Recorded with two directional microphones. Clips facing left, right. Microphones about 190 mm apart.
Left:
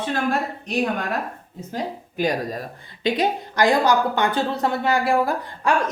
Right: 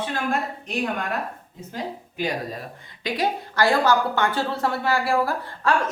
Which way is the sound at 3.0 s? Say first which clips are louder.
Left 4 dB; 20° left (ahead or behind).